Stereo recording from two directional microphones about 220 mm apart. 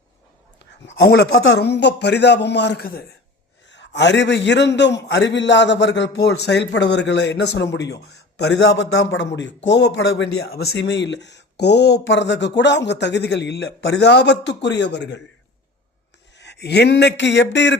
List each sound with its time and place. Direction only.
0.9 s a man's voice: 50° left (ahead or behind)
16.4 s a man's voice: 50° left (ahead or behind)